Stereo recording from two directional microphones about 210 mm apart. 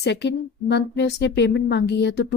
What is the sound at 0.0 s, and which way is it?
Speech, 55° left (ahead or behind).